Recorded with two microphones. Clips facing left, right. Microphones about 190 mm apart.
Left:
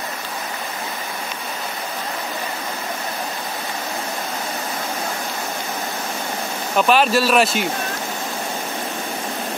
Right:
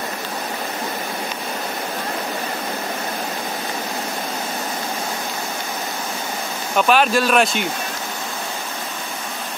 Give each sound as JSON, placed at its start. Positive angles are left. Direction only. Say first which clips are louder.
{"t": 6.8, "sound": "speech", "louder": "even", "side_deg": 0}